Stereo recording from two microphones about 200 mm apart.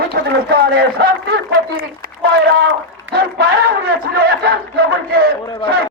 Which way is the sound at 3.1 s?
50° right (ahead or behind).